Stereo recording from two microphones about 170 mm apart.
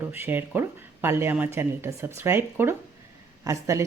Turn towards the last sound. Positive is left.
turn(degrees=-20)  # may be behind; listen again after turning